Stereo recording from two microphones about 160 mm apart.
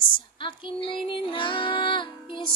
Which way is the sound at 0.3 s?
30° left (ahead or behind).